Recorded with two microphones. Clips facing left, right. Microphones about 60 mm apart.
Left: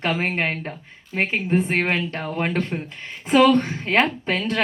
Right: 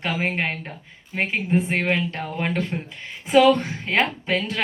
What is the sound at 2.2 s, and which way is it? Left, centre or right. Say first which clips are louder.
Speech: left 1 dB; left.